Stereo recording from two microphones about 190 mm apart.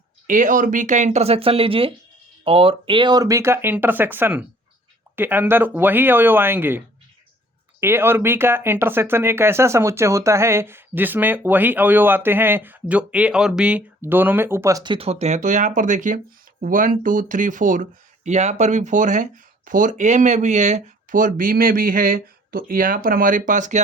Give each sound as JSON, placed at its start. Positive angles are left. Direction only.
{"t": 0.3, "sound": "speech", "side_deg": -40}
{"t": 14.9, "sound": "speech", "side_deg": -30}